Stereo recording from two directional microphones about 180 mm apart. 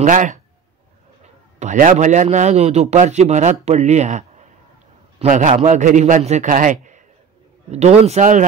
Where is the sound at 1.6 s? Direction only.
45° right (ahead or behind).